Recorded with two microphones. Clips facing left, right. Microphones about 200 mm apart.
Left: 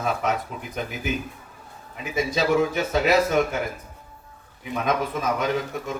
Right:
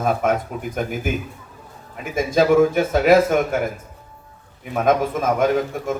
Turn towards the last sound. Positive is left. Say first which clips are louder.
# right 6 dB
turn(degrees=-50)  # may be behind; listen again after turning